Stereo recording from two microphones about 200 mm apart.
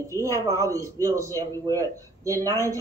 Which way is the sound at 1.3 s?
15° left (ahead or behind).